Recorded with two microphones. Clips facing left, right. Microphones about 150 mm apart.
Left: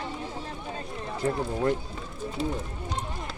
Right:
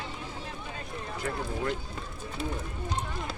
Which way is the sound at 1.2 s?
35° left (ahead or behind).